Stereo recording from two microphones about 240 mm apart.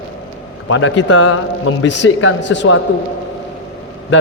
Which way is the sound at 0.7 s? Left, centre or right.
Left.